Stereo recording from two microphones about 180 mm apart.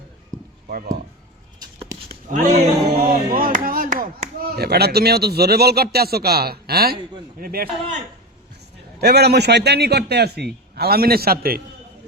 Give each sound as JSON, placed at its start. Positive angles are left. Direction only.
{"t": 0.7, "sound": "speech", "side_deg": -55}
{"t": 1.6, "sound": "a sound", "side_deg": -20}
{"t": 2.3, "sound": "music", "side_deg": -40}
{"t": 3.1, "sound": "a man's voice", "side_deg": -50}
{"t": 9.0, "sound": "a man's voice", "side_deg": -65}